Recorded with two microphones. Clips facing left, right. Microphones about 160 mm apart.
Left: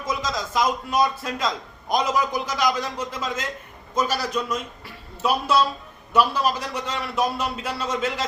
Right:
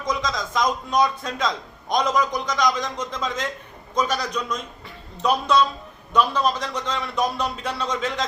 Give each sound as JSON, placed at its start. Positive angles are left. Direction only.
{"t": 0.0, "sound": "a man's voice", "side_deg": 5}